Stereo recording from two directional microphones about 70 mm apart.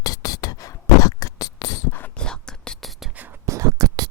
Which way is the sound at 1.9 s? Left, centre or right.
Left.